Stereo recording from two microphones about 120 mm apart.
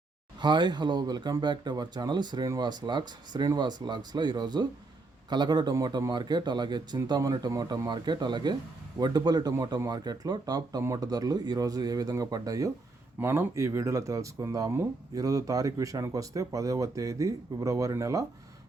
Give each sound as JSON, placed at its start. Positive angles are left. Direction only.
{"t": 0.3, "sound": "speech", "side_deg": -40}
{"t": 13.1, "sound": "speech", "side_deg": -20}